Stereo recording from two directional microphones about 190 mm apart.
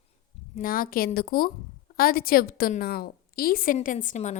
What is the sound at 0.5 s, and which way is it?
A woman's voice, 50° left (ahead or behind).